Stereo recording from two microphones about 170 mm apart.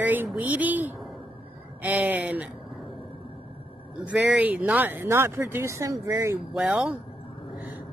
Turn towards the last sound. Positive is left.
turn(degrees=-5)  # may be behind; listen again after turning